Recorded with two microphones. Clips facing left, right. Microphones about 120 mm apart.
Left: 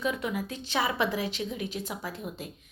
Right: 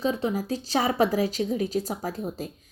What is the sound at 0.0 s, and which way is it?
A woman's voice, 30° right (ahead or behind).